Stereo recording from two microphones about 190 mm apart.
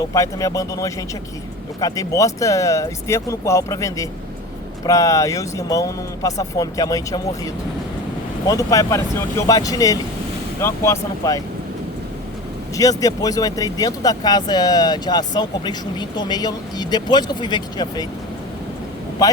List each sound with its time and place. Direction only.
0.0 s speech: 15° left (ahead or behind)
12.7 s speech: 20° left (ahead or behind)